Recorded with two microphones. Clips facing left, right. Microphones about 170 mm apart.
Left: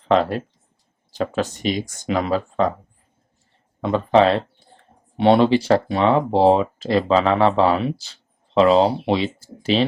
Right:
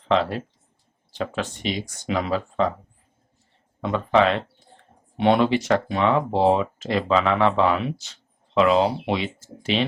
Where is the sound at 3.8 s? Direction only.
30° left (ahead or behind).